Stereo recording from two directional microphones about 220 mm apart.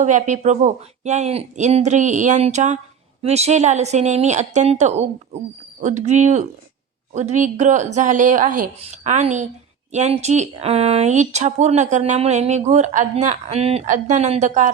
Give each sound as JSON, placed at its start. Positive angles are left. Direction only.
{"t": 0.0, "sound": "speech", "side_deg": -35}